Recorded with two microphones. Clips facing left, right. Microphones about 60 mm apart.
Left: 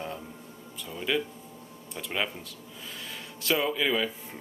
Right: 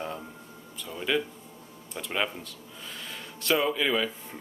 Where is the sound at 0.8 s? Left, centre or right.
Centre.